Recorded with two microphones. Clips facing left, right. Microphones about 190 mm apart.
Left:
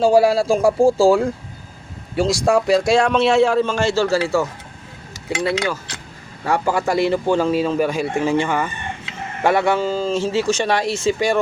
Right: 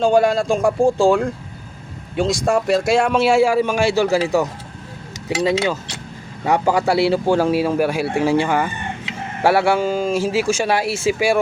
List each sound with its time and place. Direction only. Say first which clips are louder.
0.0 s a man's voice: left 1 dB; 5° left (ahead or behind)